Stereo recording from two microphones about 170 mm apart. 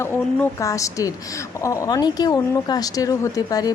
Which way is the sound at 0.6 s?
20° left (ahead or behind).